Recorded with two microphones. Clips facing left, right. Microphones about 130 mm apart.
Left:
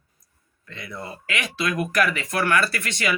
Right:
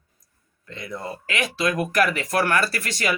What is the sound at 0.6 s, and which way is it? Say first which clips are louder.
Speech: right 3 dB; 40° right (ahead or behind).